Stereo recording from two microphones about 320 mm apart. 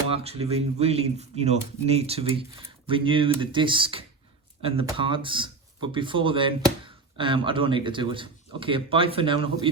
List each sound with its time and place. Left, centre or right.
0.1 s speech: centre